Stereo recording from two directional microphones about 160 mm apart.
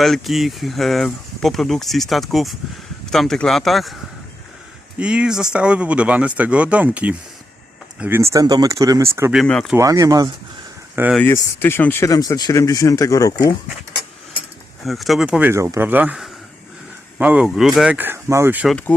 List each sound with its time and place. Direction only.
0.0 s speech: centre (ahead or behind)
4.9 s speech: 5° right (ahead or behind)
9.3 s speech: 5° left (ahead or behind)
9.7 s speech: 20° right (ahead or behind)
11.3 s speech: 15° left (ahead or behind)
14.8 s speech: centre (ahead or behind)
18.7 s speech: 10° left (ahead or behind)